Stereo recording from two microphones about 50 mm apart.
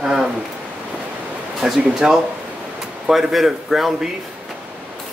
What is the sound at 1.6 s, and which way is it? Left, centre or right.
A man's voice, centre.